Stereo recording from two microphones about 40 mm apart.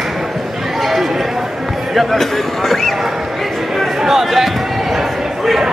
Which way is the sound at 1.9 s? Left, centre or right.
Centre.